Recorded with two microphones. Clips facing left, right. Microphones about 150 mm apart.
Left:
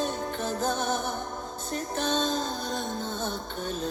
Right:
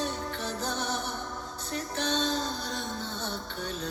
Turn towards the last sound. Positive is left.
turn(degrees=50)  # may be behind; listen again after turning